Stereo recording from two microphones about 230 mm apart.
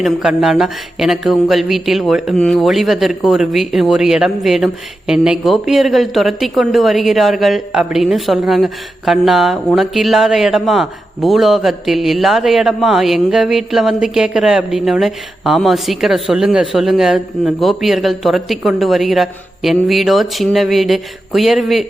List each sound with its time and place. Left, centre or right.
0.0 s speech: centre